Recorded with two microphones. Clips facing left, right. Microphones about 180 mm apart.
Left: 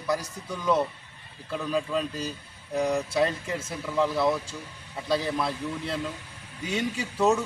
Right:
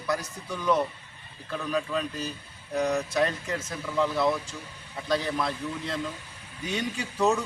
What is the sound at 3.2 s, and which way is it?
Speech, 10° left (ahead or behind).